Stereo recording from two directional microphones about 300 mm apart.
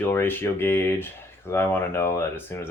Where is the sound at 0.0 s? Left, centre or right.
Centre.